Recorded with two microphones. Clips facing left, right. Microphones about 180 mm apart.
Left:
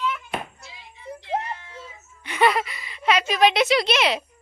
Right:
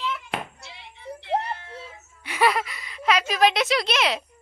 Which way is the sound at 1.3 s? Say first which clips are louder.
Right 2 dB; 30° right (ahead or behind).